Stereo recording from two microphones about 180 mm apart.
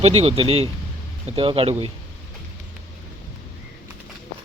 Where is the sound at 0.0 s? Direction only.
35° right (ahead or behind).